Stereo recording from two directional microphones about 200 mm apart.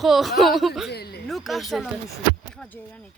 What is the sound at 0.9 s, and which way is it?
Speech, 55° left (ahead or behind).